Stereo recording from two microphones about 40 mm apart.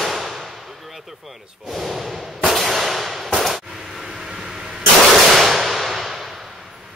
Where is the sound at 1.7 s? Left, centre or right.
Centre.